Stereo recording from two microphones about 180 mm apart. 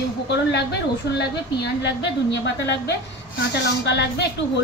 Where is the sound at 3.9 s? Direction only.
70° left (ahead or behind).